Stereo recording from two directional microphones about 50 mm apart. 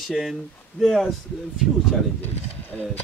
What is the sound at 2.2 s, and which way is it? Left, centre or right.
Speech, left.